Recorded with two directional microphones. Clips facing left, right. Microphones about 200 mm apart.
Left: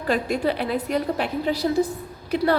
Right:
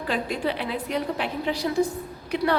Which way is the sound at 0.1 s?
45° left (ahead or behind).